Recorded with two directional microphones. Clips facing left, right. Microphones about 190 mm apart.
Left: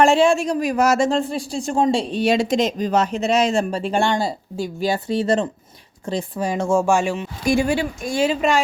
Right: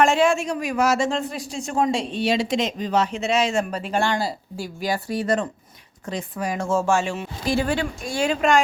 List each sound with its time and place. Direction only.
0.0 s speech: 30° left (ahead or behind)
6.7 s speech: 15° left (ahead or behind)